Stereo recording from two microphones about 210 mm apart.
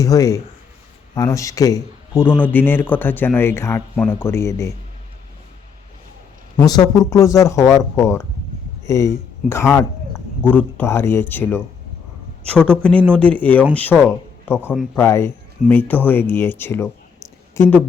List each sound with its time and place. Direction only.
0.0 s a man's voice: 15° left (ahead or behind)
6.6 s speech: 20° left (ahead or behind)